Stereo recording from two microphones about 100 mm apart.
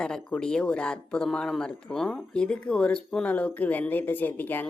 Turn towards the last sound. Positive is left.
turn(degrees=20)  # may be behind; listen again after turning